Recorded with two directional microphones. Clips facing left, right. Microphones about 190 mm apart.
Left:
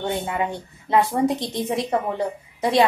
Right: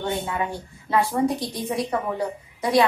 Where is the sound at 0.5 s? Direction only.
20° left (ahead or behind).